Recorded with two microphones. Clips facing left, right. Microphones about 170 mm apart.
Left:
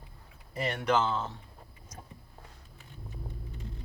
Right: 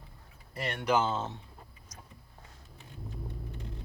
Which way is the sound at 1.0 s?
25° right (ahead or behind).